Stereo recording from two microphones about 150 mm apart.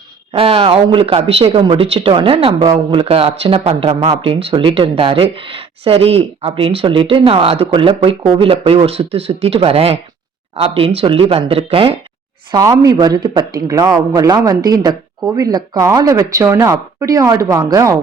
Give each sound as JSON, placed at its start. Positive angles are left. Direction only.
{"t": 0.3, "sound": "speech", "side_deg": -40}
{"t": 12.5, "sound": "a man's voice", "side_deg": -25}